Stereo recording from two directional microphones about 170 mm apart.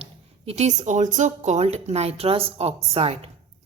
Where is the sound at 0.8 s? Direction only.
45° right (ahead or behind).